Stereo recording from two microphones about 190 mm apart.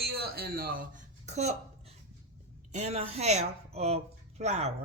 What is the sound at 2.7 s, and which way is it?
Speech, 35° right (ahead or behind).